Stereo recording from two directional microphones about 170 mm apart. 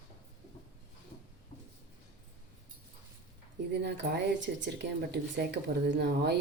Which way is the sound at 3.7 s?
90° right.